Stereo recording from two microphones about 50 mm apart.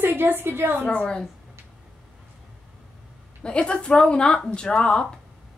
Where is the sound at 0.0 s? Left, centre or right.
Right.